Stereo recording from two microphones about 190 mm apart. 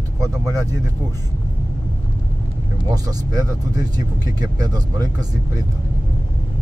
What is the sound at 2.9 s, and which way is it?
Speech, 20° right (ahead or behind).